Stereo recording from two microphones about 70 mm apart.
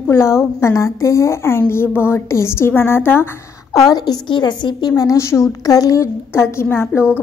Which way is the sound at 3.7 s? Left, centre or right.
Left.